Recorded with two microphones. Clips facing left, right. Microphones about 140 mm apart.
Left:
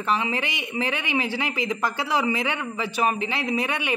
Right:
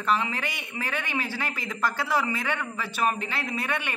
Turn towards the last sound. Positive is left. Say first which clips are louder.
# left 5 dB
turn(degrees=15)  # may be behind; listen again after turning